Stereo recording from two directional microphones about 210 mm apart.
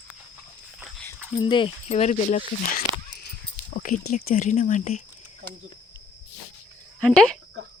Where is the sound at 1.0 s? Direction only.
20° left (ahead or behind).